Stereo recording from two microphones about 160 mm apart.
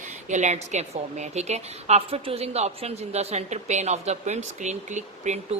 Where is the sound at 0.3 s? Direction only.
45° right (ahead or behind).